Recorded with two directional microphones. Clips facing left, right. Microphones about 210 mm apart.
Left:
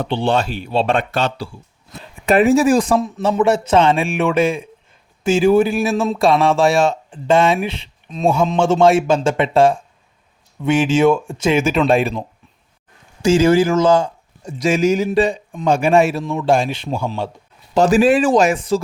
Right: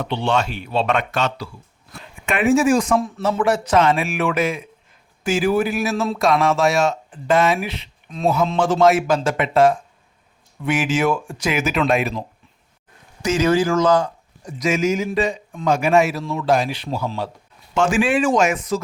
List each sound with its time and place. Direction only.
0.0 s speech: 30° left (ahead or behind)
2.2 s speech: 35° left (ahead or behind)
3.0 s a man's voice: 20° left (ahead or behind)
13.2 s a man's voice: 30° left (ahead or behind)
16.2 s a man's voice: 15° left (ahead or behind)
17.7 s speech: 35° left (ahead or behind)